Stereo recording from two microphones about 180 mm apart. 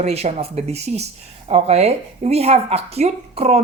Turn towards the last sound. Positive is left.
turn(degrees=-35)  # may be behind; listen again after turning